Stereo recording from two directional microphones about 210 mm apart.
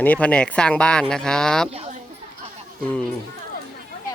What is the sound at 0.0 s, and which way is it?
Speech, 5° left (ahead or behind).